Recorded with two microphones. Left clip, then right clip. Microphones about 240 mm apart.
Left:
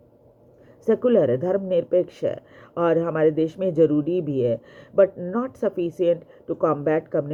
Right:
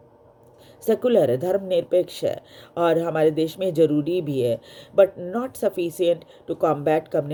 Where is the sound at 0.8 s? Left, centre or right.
Right.